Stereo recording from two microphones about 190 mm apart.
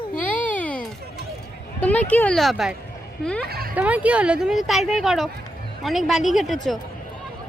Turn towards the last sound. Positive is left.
turn(degrees=0)  # may be behind; listen again after turning